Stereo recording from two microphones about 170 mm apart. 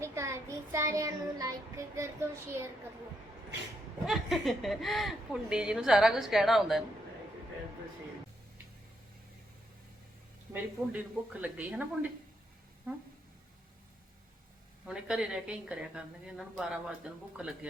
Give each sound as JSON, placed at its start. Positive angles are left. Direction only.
{"t": 0.0, "sound": "child singing", "side_deg": -15}
{"t": 4.0, "sound": "speech", "side_deg": 0}
{"t": 10.5, "sound": "a woman's voice", "side_deg": -10}
{"t": 14.8, "sound": "speech", "side_deg": -5}